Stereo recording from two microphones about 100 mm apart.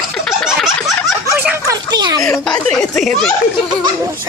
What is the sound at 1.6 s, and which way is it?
Speech, 40° right (ahead or behind).